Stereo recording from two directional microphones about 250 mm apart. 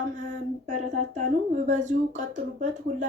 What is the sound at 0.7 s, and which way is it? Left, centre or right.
Speech, right.